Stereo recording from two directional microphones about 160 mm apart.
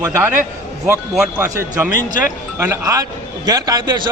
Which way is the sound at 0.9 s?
10° right (ahead or behind).